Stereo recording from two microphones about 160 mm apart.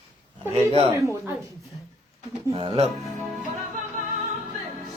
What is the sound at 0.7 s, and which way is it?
Speech, 35° right (ahead or behind).